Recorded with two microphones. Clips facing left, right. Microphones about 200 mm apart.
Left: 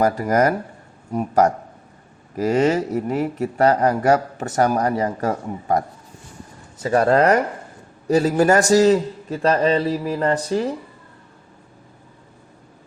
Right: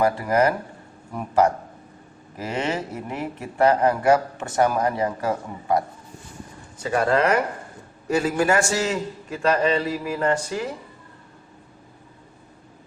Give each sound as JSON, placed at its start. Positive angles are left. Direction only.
{"t": 0.0, "sound": "speech", "side_deg": 45}
{"t": 6.8, "sound": "speech", "side_deg": 40}